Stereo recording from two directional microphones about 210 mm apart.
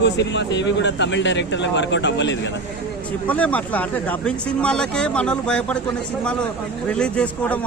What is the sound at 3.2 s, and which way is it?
Speech, 5° left (ahead or behind).